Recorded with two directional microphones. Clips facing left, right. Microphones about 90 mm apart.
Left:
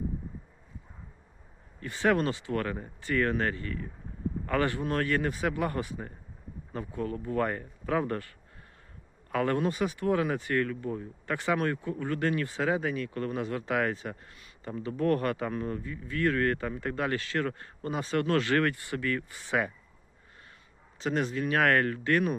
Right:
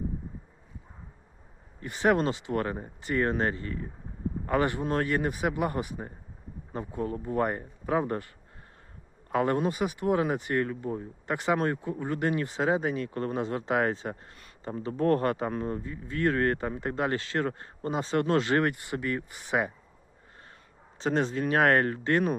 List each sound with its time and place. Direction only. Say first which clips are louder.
1.8 s a man's voice: right 2 dB; 20° right (ahead or behind)
9.3 s a man's voice: right 2 dB; 25° right (ahead or behind)
21.0 s speech: right 2 dB; 30° right (ahead or behind)